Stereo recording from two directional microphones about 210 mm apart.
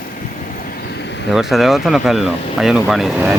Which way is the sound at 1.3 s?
Centre (ahead or behind).